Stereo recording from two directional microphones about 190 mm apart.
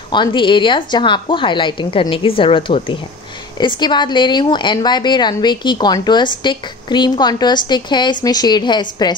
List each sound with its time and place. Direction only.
0.1 s a woman's voice: 25° left (ahead or behind)